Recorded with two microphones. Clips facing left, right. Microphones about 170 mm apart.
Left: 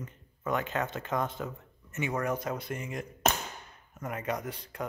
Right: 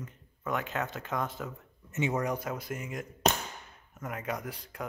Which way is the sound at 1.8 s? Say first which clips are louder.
Right 1 dB; 20° right (ahead or behind).